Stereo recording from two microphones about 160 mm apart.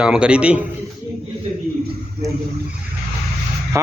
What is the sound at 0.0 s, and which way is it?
Speech, 5° right (ahead or behind).